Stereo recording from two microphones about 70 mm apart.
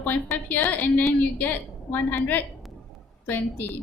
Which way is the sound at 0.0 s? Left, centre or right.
Left.